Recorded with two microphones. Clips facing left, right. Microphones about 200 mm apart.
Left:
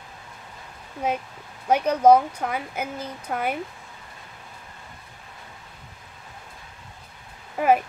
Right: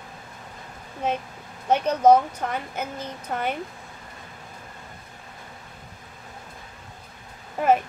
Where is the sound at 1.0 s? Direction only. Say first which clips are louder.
Even; 10° left (ahead or behind).